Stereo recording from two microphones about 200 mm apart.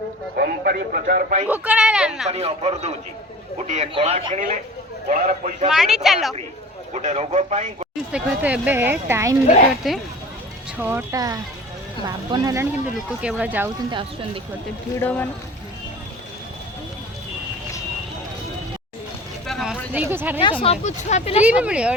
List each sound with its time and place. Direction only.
0.3 s speech: 50° right (ahead or behind)
1.5 s speech: 5° right (ahead or behind)
2.3 s speech: 30° right (ahead or behind)
5.0 s speech: 40° right (ahead or behind)
5.6 s speech: centre (ahead or behind)
6.9 s speech: 35° right (ahead or behind)
8.1 s speech: 5° right (ahead or behind)
9.8 s speech: centre (ahead or behind); by 12.6 s 20° right (ahead or behind)
13.1 s speech: 5° right (ahead or behind)
14.9 s speech: 10° left (ahead or behind)
19.5 s a sound: centre (ahead or behind)
20.4 s speech: 25° left (ahead or behind)
21.4 s speech: 5° right (ahead or behind)